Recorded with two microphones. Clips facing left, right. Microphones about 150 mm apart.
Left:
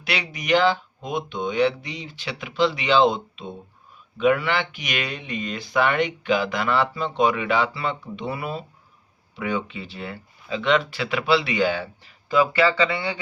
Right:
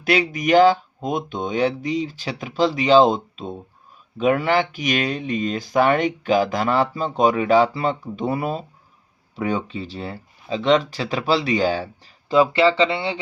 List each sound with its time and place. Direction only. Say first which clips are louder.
0.0 s speech: right 9 dB; 45° right (ahead or behind); by 13.1 s 25° right (ahead or behind)